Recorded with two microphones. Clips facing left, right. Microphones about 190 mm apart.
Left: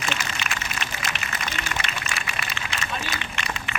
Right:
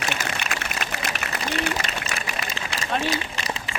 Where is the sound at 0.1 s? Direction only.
60° right (ahead or behind).